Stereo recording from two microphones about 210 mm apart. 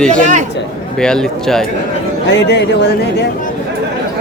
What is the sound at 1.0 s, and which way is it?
Speech, 5° left (ahead or behind).